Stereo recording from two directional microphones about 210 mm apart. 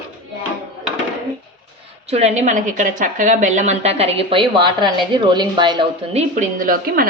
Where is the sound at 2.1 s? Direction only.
30° right (ahead or behind).